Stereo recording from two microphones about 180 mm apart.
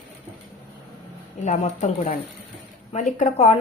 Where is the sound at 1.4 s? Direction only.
40° left (ahead or behind).